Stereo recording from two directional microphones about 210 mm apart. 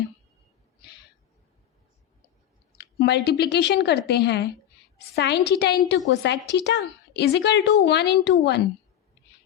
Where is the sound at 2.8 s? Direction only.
55° left (ahead or behind).